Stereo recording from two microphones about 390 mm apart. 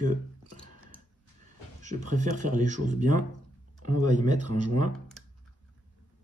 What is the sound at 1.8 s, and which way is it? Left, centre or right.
Speech, centre.